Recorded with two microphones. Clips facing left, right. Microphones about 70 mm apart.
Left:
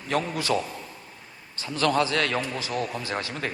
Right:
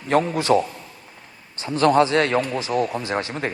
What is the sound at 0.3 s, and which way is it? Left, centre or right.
Speech, right.